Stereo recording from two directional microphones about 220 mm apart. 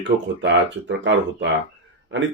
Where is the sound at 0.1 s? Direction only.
30° right (ahead or behind).